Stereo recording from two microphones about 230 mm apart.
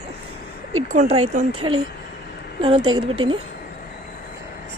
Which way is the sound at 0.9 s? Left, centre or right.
Right.